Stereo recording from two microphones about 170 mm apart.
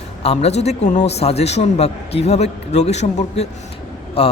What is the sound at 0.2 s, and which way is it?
Speech, 35° left (ahead or behind).